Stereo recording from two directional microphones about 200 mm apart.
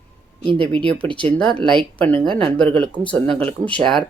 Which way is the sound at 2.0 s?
5° left (ahead or behind).